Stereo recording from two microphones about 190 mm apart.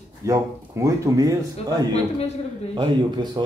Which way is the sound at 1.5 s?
35° left (ahead or behind).